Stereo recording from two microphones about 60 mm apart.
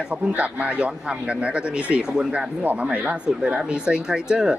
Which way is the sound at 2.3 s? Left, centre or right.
Right.